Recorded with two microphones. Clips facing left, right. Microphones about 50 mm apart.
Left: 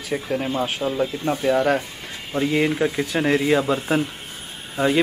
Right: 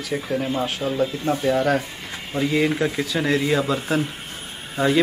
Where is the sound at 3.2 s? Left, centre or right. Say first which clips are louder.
Left 2 dB; centre.